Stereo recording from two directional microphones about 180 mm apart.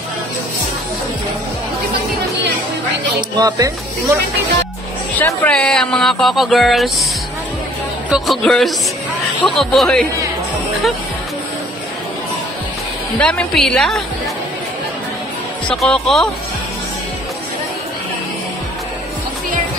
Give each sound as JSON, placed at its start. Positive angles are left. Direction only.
{"t": 3.2, "sound": "speech", "side_deg": -20}
{"t": 5.2, "sound": "speech", "side_deg": 5}
{"t": 8.1, "sound": "speech", "side_deg": 0}
{"t": 13.2, "sound": "speech", "side_deg": 5}
{"t": 15.7, "sound": "speech", "side_deg": 0}